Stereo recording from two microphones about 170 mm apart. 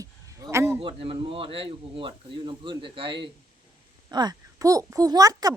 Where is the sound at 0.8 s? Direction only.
35° right (ahead or behind).